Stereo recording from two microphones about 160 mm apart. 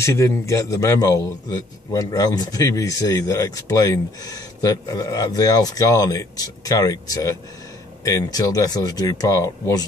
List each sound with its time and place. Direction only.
0.0 s a man's voice: 20° left (ahead or behind)